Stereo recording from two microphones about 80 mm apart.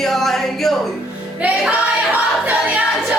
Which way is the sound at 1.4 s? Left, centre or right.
Centre.